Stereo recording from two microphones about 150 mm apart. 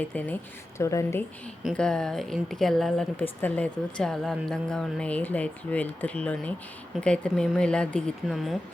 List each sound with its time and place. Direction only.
0.1 s a woman's voice: 10° left (ahead or behind)
1.7 s a woman's voice: 5° left (ahead or behind)